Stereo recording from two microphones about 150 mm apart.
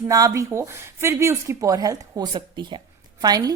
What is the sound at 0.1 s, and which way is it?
Speech, 20° right (ahead or behind).